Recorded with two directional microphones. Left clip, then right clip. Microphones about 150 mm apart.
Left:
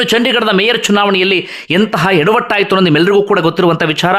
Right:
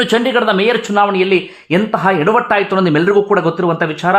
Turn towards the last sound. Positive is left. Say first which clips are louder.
# left 3 dB
turn(degrees=25)  # may be behind; listen again after turning